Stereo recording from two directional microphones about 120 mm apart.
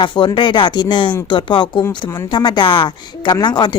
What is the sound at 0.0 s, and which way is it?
Speech, 45° left (ahead or behind).